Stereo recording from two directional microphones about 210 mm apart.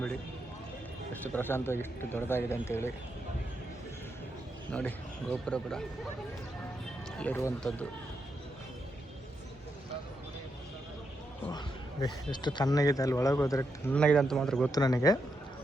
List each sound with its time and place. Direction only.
1.2 s speech: 10° left (ahead or behind)
4.7 s speech: 5° left (ahead or behind)
7.2 s speech: 10° left (ahead or behind)
11.4 s speech: 20° left (ahead or behind); by 14.7 s centre (ahead or behind)
14.7 s speech: 15° left (ahead or behind)